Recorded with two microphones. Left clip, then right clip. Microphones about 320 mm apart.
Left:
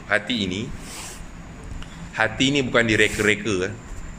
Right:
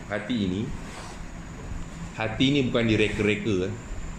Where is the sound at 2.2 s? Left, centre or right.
Left.